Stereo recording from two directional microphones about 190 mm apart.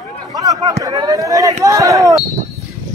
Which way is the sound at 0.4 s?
20° right (ahead or behind).